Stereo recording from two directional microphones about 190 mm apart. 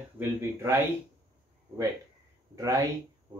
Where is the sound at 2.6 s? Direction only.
15° right (ahead or behind).